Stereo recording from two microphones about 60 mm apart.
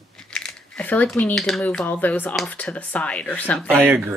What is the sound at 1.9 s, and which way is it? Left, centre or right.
Speech, left.